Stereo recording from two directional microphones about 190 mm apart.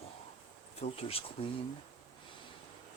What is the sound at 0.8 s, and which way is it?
Insect, 30° left (ahead or behind).